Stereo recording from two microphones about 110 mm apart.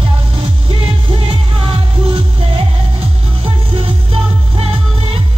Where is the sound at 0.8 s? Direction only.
60° right (ahead or behind).